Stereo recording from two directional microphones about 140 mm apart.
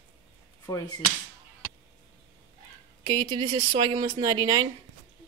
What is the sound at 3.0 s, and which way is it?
Speech, 30° right (ahead or behind).